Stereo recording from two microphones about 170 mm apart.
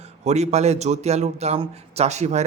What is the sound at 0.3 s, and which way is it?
A man's voice, 40° right (ahead or behind).